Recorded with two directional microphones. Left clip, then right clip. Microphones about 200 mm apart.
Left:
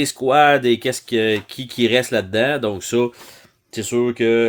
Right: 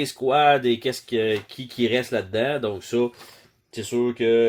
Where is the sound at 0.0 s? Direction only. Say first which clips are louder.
Left 5 dB; 40° left (ahead or behind).